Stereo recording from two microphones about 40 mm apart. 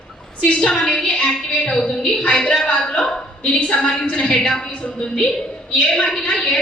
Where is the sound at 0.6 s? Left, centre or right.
Centre.